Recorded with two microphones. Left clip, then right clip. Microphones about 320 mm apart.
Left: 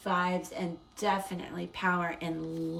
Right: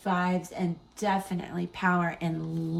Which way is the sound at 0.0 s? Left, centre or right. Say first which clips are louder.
Right 1 dB; centre.